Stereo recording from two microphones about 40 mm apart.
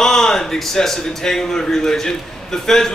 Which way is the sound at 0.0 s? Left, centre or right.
Centre.